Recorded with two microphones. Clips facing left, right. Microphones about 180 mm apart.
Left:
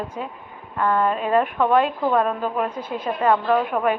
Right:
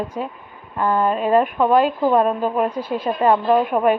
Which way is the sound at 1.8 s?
5° right (ahead or behind).